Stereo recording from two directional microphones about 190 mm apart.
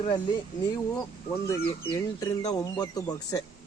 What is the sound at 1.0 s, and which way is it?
Speech, 15° left (ahead or behind).